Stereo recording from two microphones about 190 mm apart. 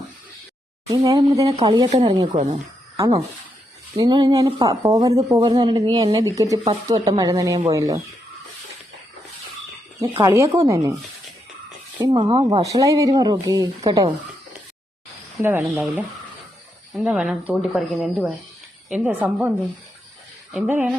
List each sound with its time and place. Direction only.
0.9 s speech: 20° right (ahead or behind)
2.3 s speech: 40° right (ahead or behind)
3.9 s speech: 25° right (ahead or behind)
10.2 s a woman's voice: 15° right (ahead or behind)
11.9 s speech: 25° right (ahead or behind)
15.4 s a woman's voice: 10° right (ahead or behind)